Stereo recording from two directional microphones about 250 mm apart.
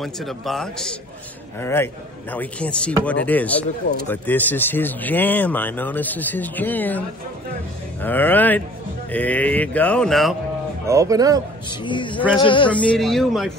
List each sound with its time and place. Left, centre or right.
0.0 s speech: centre
10.9 s speech: centre
11.8 s a man's voice: centre
12.7 s speech: centre